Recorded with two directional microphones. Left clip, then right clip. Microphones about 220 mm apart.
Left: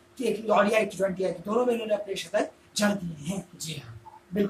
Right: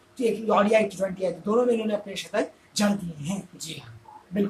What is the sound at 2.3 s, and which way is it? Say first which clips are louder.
Speech: right 1 dB; 15° right (ahead or behind).